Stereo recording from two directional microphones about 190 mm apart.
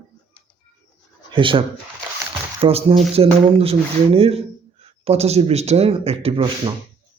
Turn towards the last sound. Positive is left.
turn(degrees=-30)  # may be behind; listen again after turning